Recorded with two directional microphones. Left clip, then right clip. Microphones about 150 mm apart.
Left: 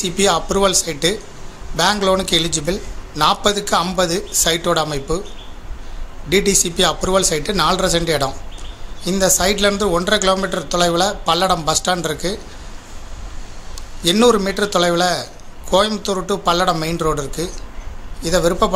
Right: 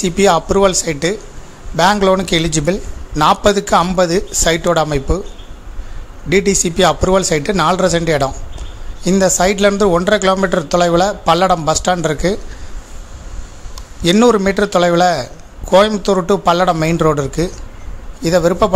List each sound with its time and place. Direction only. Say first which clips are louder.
0.0 s a man's voice: right 4 dB; 60° right (ahead or behind)
6.2 s a man's voice: right 2 dB; 55° right (ahead or behind)
14.0 s a man's voice: right 3 dB; 55° right (ahead or behind)